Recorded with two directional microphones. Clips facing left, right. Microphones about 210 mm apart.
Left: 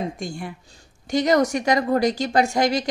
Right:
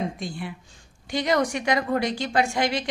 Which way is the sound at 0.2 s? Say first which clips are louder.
Left 2 dB; 45° left (ahead or behind).